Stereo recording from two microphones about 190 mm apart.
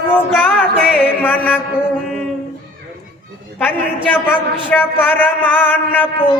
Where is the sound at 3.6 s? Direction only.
10° left (ahead or behind).